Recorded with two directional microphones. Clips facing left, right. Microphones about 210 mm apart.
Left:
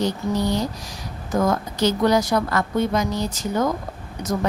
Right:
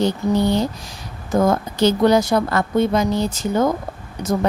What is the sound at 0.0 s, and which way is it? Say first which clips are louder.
A woman's voice: right 4 dB; 25° right (ahead or behind).